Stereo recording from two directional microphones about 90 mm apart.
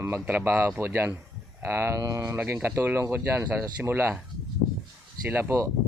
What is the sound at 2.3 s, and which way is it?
Speech, 20° right (ahead or behind).